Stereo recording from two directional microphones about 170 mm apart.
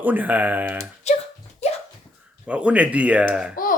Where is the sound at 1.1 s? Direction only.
40° left (ahead or behind).